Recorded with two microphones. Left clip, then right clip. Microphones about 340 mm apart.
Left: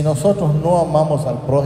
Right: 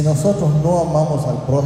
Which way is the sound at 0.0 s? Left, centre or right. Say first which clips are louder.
Left 2 dB; left.